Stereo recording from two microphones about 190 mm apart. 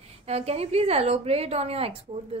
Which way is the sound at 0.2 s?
35° right (ahead or behind).